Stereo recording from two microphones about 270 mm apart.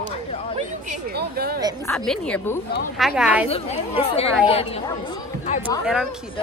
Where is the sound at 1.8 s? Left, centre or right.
Centre.